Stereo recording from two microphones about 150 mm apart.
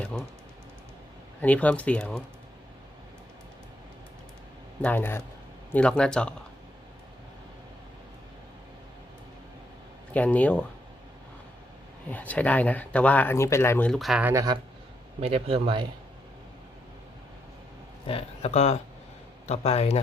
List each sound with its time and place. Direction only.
0.0 s speech: 5° left (ahead or behind)
1.4 s speech: 10° left (ahead or behind)
4.8 s speech: 10° left (ahead or behind)
10.1 s speech: 10° left (ahead or behind)
12.1 s speech: 10° left (ahead or behind)
14.3 s speech: 25° right (ahead or behind)
15.2 s speech: 40° right (ahead or behind)
18.0 s speech: 40° left (ahead or behind)